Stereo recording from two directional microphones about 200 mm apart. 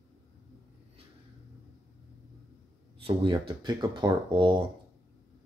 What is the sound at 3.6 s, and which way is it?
Speech, 20° right (ahead or behind).